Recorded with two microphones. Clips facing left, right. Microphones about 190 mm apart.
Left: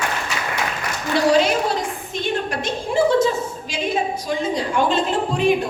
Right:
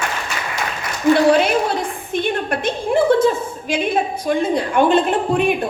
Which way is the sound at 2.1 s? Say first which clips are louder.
Right 4 dB; 55° right (ahead or behind).